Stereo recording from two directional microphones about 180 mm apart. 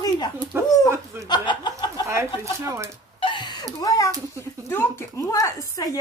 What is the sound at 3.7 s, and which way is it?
A woman's voice, 20° left (ahead or behind).